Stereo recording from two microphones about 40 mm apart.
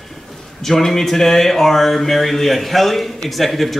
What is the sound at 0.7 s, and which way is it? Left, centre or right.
A man's voice, centre.